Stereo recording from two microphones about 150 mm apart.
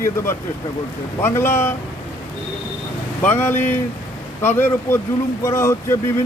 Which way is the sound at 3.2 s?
15° left (ahead or behind).